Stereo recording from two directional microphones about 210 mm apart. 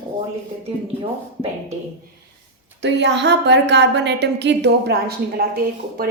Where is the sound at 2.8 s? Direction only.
55° right (ahead or behind).